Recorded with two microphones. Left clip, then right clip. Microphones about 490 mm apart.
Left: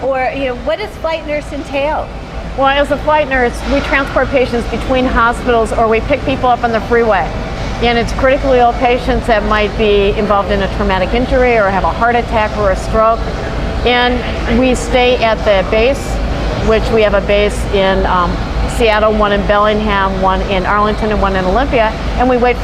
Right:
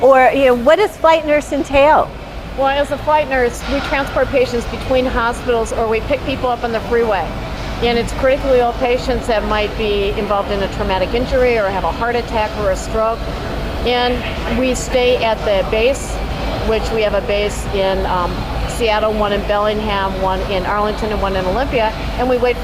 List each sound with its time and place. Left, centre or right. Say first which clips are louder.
0.1 s speech: right 6 dB; right
2.6 s speech: left 4 dB; centre